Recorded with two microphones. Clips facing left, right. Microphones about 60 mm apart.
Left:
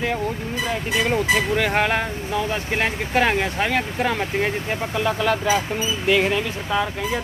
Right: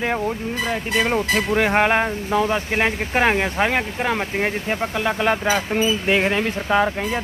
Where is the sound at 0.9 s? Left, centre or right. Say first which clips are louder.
Even; right.